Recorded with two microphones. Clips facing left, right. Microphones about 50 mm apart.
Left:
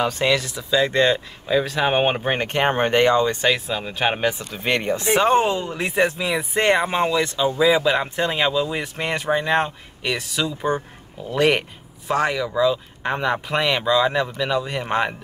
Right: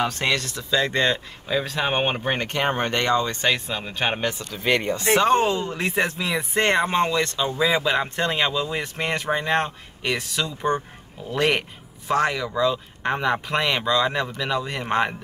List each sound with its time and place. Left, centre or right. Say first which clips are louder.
0.0 s speech: left 3 dB; centre
3.3 s speech: left 3 dB; centre
4.3 s speech: even; left
5.8 s speech: left 3 dB; centre